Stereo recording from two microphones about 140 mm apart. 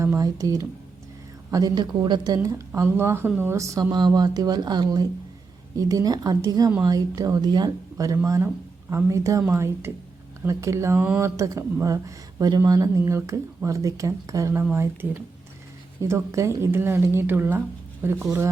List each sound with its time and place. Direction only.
0.0 s a woman's voice: 25° right (ahead or behind)
14.6 s speech: 10° right (ahead or behind)